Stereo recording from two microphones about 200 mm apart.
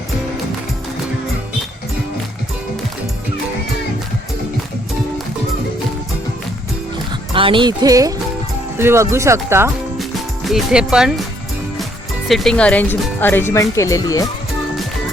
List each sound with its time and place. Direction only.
7.3 s speech: 25° right (ahead or behind)
10.0 s music: centre (ahead or behind)
12.3 s speech: centre (ahead or behind); by 14.3 s 15° left (ahead or behind)